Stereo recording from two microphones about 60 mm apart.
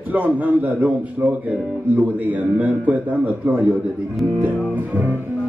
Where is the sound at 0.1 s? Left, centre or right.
Right.